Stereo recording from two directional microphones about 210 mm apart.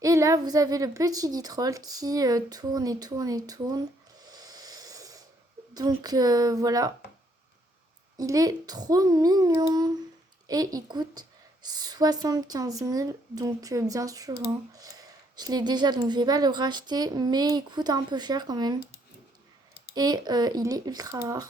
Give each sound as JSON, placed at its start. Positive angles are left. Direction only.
{"t": 0.0, "sound": "a woman's voice", "side_deg": -15}
{"t": 4.3, "sound": "a sound", "side_deg": -20}
{"t": 5.7, "sound": "a woman's voice", "side_deg": -20}
{"t": 8.2, "sound": "a woman's voice", "side_deg": -15}
{"t": 19.9, "sound": "a woman's voice", "side_deg": -20}